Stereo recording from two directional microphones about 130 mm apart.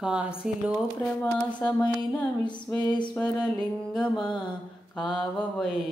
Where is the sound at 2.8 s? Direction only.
35° left (ahead or behind).